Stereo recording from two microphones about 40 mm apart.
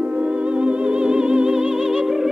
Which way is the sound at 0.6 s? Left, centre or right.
Right.